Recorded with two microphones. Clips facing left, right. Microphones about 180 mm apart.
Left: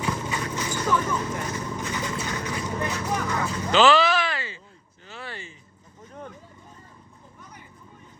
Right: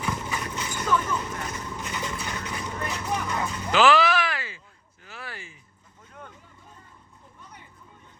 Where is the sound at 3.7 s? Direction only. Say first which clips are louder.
Left 1 dB; 15° right (ahead or behind).